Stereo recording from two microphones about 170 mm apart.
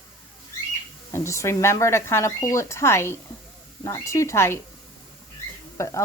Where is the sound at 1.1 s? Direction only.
15° left (ahead or behind).